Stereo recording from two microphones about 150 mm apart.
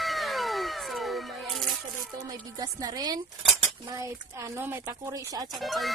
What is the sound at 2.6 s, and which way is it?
Speech, 25° right (ahead or behind).